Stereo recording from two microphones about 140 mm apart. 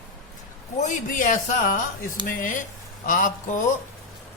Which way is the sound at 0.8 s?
65° left (ahead or behind).